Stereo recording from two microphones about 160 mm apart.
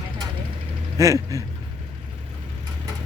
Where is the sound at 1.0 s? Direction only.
20° right (ahead or behind).